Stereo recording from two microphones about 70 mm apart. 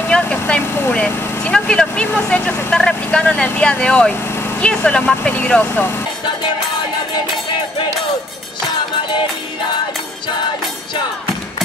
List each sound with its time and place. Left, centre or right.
0.1 s speech: centre